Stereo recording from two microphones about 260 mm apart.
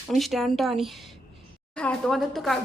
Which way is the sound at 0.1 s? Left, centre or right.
Centre.